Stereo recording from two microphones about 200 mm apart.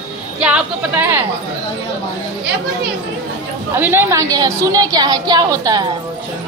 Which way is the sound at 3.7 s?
10° right (ahead or behind).